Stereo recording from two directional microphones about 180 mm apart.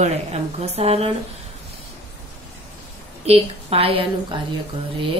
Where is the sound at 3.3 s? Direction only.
35° right (ahead or behind).